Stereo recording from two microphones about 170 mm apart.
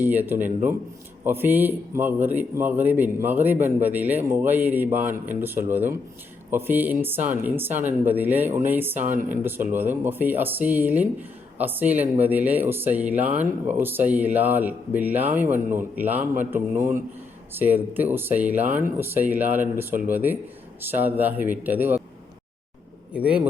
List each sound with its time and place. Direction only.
0.0 s a man's voice: 10° right (ahead or behind)
9.0 s speech: 45° right (ahead or behind)
9.3 s a man's voice: 10° right (ahead or behind)
23.1 s a man's voice: 5° right (ahead or behind)